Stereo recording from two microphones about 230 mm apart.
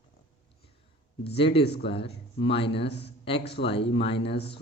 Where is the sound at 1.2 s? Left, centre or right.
Left.